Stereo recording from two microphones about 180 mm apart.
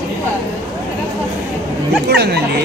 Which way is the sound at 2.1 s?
65° right (ahead or behind).